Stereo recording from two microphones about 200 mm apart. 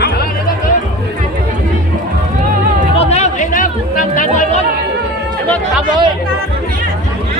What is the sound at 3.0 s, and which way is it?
Chatter, 35° left (ahead or behind).